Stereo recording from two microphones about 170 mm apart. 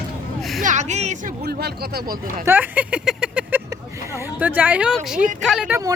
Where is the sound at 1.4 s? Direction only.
70° right (ahead or behind).